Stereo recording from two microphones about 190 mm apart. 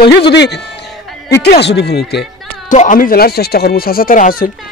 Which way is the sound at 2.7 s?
40° left (ahead or behind).